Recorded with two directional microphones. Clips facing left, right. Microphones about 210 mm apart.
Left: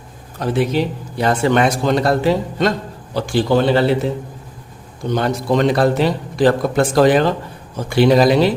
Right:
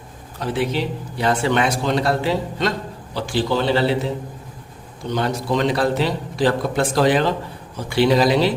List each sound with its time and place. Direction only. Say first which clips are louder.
0.3 s a man's voice: left 4 dB; 45° left (ahead or behind)
5.1 s a man's voice: left 4 dB; 50° left (ahead or behind)